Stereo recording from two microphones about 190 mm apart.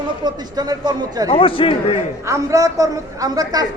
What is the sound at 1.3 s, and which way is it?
Speech, 30° left (ahead or behind).